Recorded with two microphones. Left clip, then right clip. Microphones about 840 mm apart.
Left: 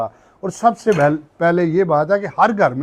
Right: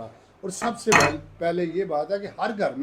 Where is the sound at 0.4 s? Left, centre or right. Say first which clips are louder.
Left 10 dB; left.